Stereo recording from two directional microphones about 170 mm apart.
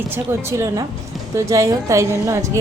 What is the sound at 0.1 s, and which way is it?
A woman's voice, 15° right (ahead or behind).